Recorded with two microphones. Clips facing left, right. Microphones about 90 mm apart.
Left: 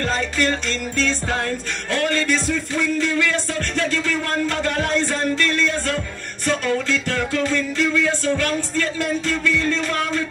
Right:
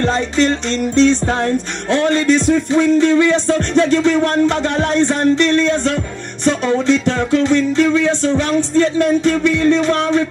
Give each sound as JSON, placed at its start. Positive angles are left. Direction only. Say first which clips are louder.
{"t": 0.0, "sound": "music", "louder": "right 6 dB", "side_deg": -25}